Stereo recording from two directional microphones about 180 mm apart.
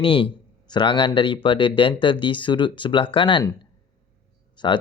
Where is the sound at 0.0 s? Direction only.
30° left (ahead or behind).